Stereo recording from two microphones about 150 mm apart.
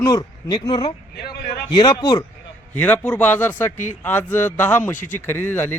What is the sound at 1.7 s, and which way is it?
Speech, 30° left (ahead or behind).